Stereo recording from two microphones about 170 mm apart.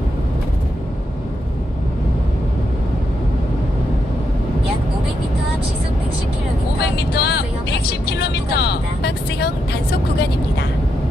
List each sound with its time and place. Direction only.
7.2 s vehicle: 70° left (ahead or behind)